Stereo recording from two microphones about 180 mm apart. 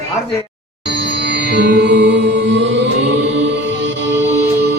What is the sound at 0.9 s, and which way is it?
Music, 75° right (ahead or behind).